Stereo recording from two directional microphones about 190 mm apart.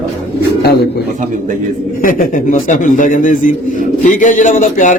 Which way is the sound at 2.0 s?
45° left (ahead or behind).